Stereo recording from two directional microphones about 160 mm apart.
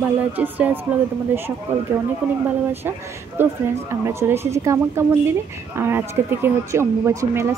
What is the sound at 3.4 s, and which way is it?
Speech, 15° right (ahead or behind).